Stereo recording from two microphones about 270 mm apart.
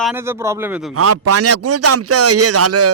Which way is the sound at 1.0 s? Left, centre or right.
Right.